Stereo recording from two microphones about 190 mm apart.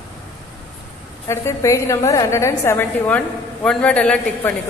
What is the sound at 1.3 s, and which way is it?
A woman's voice, 15° left (ahead or behind).